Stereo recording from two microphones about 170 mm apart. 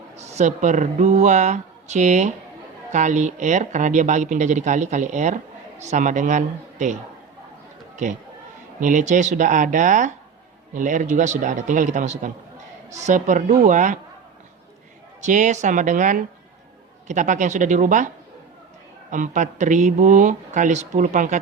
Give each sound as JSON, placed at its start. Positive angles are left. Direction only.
{"t": 0.2, "sound": "speech", "side_deg": -40}
{"t": 8.8, "sound": "speech", "side_deg": -50}
{"t": 15.2, "sound": "speech", "side_deg": -45}
{"t": 19.1, "sound": "speech", "side_deg": -50}